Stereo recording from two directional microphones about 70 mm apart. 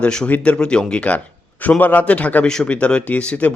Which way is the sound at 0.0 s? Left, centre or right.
Centre.